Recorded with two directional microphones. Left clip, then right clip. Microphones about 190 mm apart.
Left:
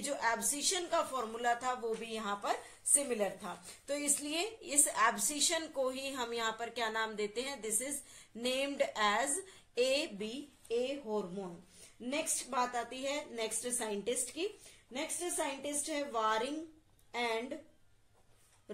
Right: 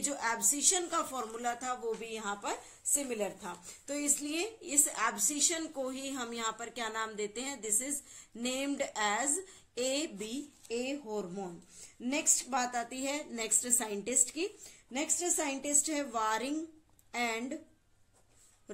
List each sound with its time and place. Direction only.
0.0 s a woman's voice: 25° right (ahead or behind)